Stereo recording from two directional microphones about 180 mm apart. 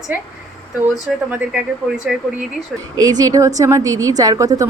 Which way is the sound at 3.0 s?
20° right (ahead or behind).